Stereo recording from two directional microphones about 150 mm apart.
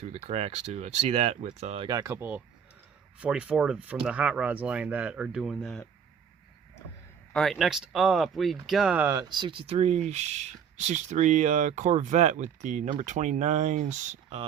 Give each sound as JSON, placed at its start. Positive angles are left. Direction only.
{"t": 0.0, "sound": "speech", "side_deg": -45}
{"t": 1.9, "sound": "speech", "side_deg": -25}
{"t": 7.3, "sound": "speech", "side_deg": 0}
{"t": 9.3, "sound": "speech", "side_deg": -35}